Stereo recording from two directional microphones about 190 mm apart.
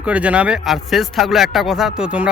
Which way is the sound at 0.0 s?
5° right (ahead or behind).